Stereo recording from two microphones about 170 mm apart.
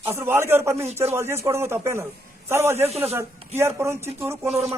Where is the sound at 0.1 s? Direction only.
15° right (ahead or behind).